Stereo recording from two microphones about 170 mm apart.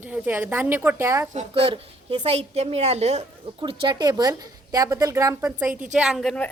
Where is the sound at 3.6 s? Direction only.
30° right (ahead or behind); by 6.5 s 5° left (ahead or behind).